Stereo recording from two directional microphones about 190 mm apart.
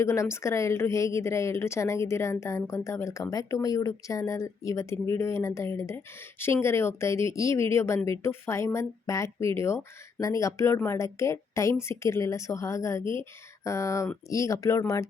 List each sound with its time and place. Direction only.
0.0 s a woman's voice: 15° left (ahead or behind)